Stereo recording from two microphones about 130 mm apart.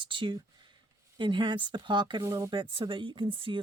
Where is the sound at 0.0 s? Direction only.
40° right (ahead or behind).